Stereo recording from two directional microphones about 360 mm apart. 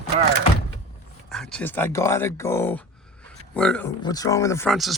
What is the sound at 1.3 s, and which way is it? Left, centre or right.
Speech, centre.